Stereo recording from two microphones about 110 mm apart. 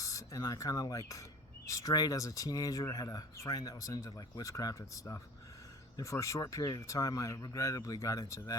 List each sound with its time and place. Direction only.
0.0 s speech: 30° left (ahead or behind)